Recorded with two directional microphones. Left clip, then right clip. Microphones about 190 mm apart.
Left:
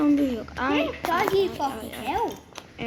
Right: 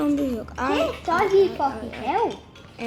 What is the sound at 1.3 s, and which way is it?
Speech, 40° right (ahead or behind).